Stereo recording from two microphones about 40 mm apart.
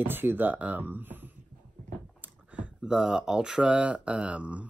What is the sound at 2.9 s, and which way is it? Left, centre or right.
Speech, centre.